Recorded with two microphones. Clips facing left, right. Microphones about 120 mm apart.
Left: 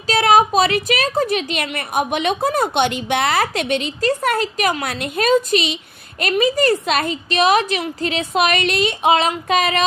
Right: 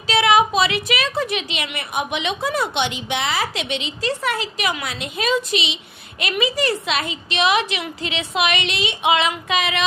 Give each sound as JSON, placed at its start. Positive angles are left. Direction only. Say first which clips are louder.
{"t": 0.1, "sound": "a woman's voice", "louder": "left 2 dB", "side_deg": 40}